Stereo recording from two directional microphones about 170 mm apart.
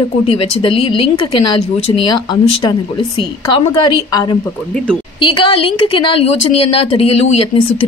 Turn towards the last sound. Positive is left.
turn(degrees=35)  # may be behind; listen again after turning